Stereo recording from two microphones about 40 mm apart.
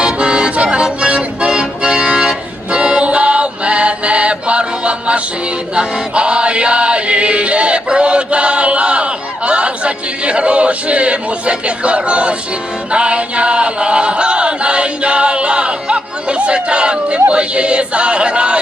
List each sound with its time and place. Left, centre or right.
0.0 s music: right
0.5 s accordion: right
2.7 s music: right
12.9 s choir: right
17.3 s a sound: right